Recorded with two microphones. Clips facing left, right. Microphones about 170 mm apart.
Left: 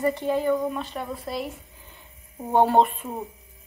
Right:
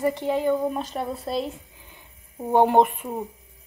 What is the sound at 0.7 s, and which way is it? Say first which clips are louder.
Speech: right 3 dB; 35° right (ahead or behind).